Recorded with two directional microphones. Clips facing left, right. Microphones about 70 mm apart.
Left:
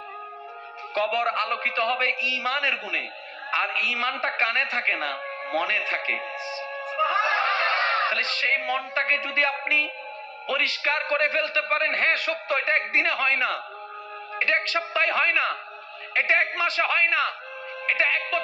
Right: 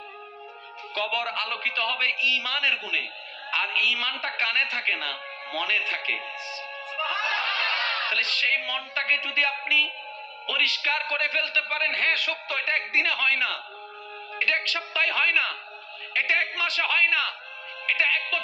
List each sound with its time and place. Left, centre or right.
0.9 s a man's voice: left